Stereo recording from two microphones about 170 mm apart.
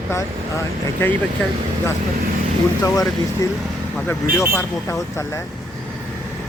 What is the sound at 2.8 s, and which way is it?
Speech, 20° left (ahead or behind).